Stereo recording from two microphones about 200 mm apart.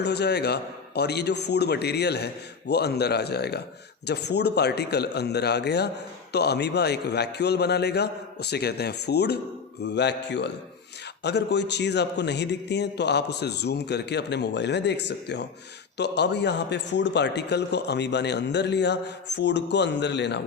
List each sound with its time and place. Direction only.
0.0 s a man's voice: 55° left (ahead or behind)